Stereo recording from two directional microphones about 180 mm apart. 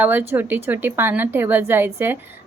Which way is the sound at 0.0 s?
10° right (ahead or behind).